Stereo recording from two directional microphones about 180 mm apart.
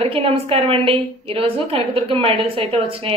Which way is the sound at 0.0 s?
30° right (ahead or behind).